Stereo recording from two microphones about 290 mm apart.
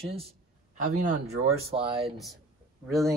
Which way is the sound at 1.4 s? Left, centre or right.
Centre.